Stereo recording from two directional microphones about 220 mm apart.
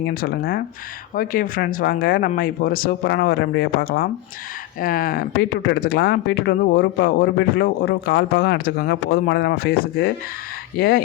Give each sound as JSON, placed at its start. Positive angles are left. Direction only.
{"t": 0.0, "sound": "speech", "side_deg": 40}